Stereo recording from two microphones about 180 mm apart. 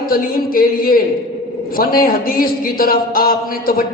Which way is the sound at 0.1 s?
55° left (ahead or behind).